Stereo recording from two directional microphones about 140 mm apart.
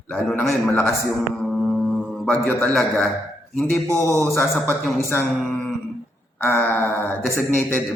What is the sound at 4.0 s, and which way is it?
A man's voice, 20° left (ahead or behind).